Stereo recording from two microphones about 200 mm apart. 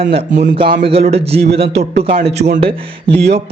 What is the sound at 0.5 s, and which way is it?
A man's voice, 30° right (ahead or behind).